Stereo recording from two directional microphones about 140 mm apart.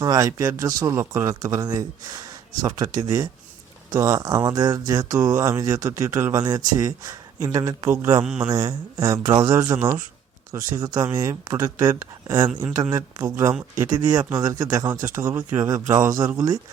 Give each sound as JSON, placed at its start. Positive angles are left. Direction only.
{"t": 0.0, "sound": "speech", "side_deg": -25}
{"t": 8.2, "sound": "speech", "side_deg": -5}
{"t": 8.4, "sound": "speech", "side_deg": -25}
{"t": 15.1, "sound": "speech", "side_deg": -20}